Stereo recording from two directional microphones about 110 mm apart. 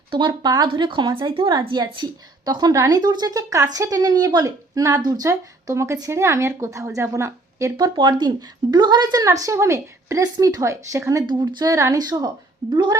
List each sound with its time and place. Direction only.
0.1 s a woman's voice: 45° right (ahead or behind); by 7.9 s 25° right (ahead or behind)
7.9 s speech: 40° right (ahead or behind)
9.2 s a woman's voice: 30° right (ahead or behind)
11.3 s speech: 40° right (ahead or behind)